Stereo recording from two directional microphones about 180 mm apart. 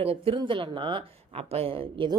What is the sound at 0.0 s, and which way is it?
Speech, 30° right (ahead or behind).